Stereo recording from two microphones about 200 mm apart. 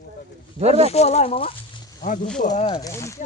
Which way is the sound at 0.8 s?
30° left (ahead or behind).